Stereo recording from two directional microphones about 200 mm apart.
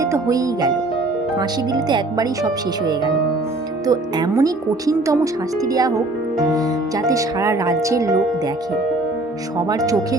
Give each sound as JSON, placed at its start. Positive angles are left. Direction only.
{"t": 0.0, "sound": "speech", "side_deg": -15}
{"t": 9.6, "sound": "speech", "side_deg": -15}